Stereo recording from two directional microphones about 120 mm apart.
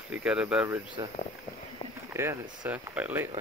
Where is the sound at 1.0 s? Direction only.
30° right (ahead or behind); by 3.2 s 15° right (ahead or behind).